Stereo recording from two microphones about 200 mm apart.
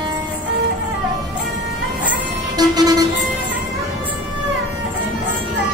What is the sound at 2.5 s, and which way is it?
Vehicle, 20° right (ahead or behind).